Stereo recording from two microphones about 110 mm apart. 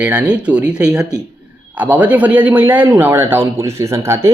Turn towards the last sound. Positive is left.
turn(degrees=-25)  # may be behind; listen again after turning